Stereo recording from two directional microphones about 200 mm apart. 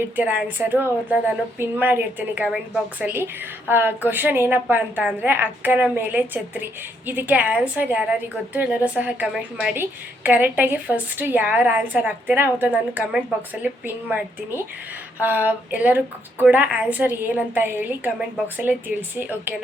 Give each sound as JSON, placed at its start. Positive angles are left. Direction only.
{"t": 0.2, "sound": "a woman's voice", "side_deg": -10}